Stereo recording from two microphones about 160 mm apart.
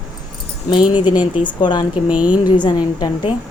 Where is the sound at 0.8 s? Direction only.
10° right (ahead or behind).